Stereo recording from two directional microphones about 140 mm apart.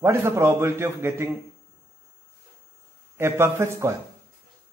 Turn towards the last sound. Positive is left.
turn(degrees=-20)  # may be behind; listen again after turning